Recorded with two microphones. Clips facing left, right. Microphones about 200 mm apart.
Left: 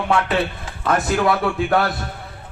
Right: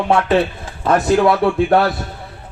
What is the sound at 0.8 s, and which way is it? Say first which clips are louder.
Music: right 5 dB; 30° right (ahead or behind).